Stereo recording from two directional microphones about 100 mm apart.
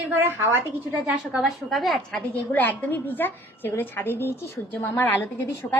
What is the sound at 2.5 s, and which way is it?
A woman's voice, 20° left (ahead or behind).